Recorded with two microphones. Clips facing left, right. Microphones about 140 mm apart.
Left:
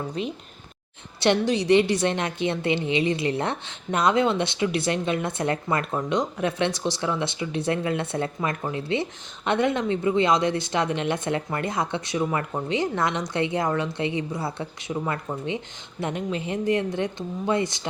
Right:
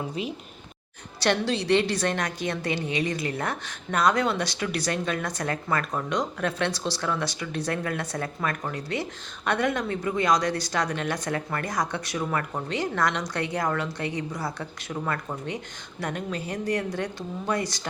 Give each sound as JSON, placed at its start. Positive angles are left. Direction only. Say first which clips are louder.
{"t": 0.2, "sound": "speech", "louder": "left 3 dB", "side_deg": -5}
{"t": 1.2, "sound": "a woman's voice", "louder": "left 3 dB", "side_deg": 20}